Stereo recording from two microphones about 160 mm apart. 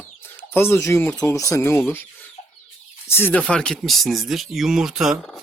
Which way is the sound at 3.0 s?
15° left (ahead or behind).